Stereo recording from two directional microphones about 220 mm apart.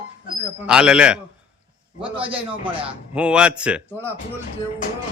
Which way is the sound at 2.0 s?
25° right (ahead or behind).